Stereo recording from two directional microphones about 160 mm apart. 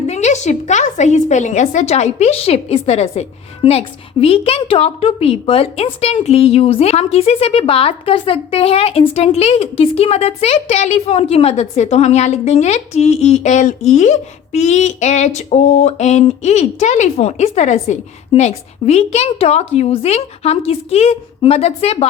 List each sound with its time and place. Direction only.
0.1 s a woman's voice: 45° left (ahead or behind)